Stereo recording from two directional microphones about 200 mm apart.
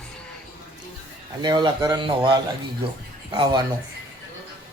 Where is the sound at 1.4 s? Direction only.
20° right (ahead or behind).